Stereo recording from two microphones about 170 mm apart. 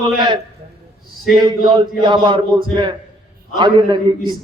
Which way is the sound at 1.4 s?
25° right (ahead or behind).